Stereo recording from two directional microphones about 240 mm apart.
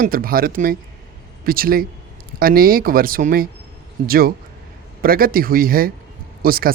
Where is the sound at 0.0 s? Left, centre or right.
Right.